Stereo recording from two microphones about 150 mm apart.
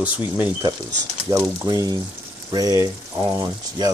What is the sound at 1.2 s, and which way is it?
Speech, 20° right (ahead or behind).